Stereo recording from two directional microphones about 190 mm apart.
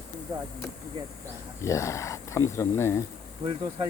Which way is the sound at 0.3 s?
15° right (ahead or behind).